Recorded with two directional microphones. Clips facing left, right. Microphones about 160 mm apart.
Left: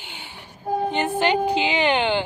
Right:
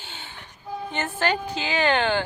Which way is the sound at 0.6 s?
50° left (ahead or behind).